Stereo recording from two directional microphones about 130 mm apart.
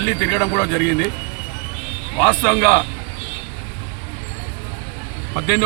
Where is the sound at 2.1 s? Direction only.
20° left (ahead or behind).